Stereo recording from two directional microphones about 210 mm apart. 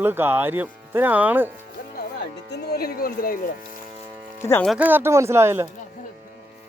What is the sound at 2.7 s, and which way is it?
Speech, 45° left (ahead or behind).